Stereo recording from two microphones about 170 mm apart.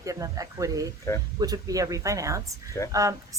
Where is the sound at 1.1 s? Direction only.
15° left (ahead or behind).